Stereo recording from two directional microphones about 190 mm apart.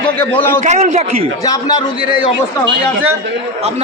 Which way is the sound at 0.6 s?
40° right (ahead or behind).